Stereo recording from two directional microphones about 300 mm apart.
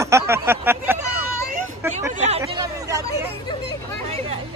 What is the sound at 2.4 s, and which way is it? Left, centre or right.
Chatter, centre.